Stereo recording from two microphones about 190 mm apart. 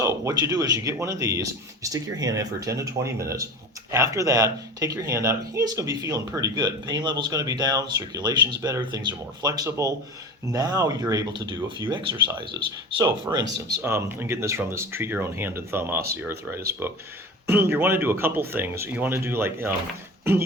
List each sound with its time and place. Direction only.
0.0 s speech: 15° right (ahead or behind)
13.3 s speech: 15° right (ahead or behind)